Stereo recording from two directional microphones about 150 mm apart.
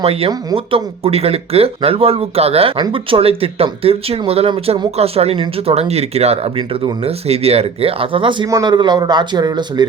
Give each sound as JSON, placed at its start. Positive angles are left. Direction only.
{"t": 0.0, "sound": "speech", "side_deg": -40}